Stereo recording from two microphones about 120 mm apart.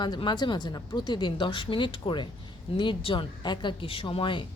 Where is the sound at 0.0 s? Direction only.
40° left (ahead or behind).